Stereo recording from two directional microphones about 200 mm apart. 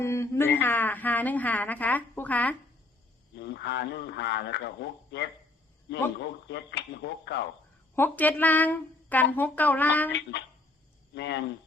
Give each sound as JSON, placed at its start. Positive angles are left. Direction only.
{"t": 0.0, "sound": "a woman's voice", "side_deg": 15}
{"t": 3.3, "sound": "speech", "side_deg": 60}
{"t": 7.9, "sound": "a woman's voice", "side_deg": 10}
{"t": 10.1, "sound": "speech", "side_deg": 60}